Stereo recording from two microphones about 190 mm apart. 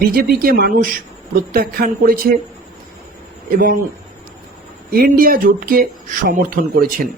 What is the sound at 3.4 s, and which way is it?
Speech, 45° right (ahead or behind).